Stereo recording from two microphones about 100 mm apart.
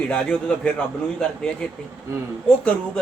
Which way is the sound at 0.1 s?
10° left (ahead or behind).